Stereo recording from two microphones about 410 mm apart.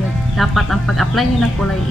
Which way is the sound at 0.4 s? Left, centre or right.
Centre.